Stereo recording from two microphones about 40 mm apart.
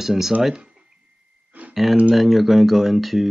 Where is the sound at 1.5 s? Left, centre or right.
Right.